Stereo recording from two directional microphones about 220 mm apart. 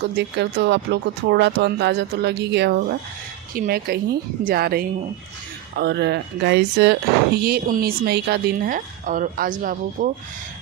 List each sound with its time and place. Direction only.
0.2 s a woman's voice: 50° right (ahead or behind)